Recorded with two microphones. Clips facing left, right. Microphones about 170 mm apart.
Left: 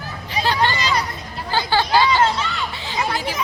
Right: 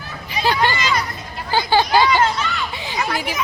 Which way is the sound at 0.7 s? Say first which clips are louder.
Right 1 dB; 35° left (ahead or behind).